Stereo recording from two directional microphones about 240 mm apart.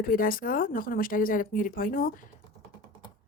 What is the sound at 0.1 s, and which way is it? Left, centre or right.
A woman's voice, left.